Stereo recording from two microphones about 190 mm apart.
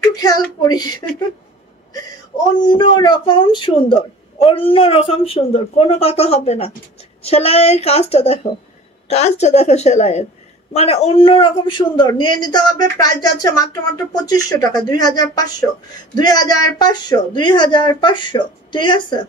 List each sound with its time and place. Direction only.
0.1 s speech: 20° left (ahead or behind)
2.5 s a woman's voice: 25° left (ahead or behind)